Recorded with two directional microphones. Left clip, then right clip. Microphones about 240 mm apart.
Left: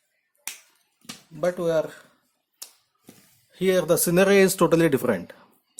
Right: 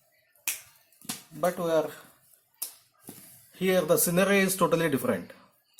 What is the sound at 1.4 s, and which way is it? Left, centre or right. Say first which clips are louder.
Speech: left 3 dB; left.